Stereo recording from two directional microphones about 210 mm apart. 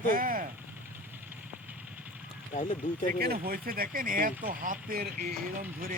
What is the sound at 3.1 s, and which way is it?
Speech, 45° right (ahead or behind).